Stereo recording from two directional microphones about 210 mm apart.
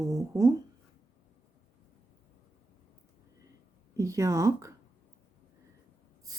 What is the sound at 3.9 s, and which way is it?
Speech, 15° right (ahead or behind).